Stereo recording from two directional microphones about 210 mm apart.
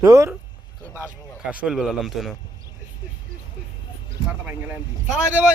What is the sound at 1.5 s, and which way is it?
Speech, 5° right (ahead or behind).